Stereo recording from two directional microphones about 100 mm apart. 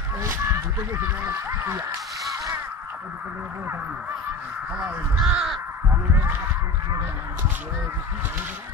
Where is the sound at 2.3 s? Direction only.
35° right (ahead or behind).